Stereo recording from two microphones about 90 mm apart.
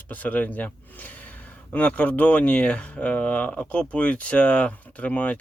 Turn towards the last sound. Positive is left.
turn(degrees=15)  # may be behind; listen again after turning